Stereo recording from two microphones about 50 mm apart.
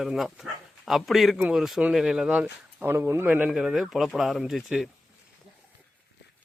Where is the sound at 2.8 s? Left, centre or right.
Right.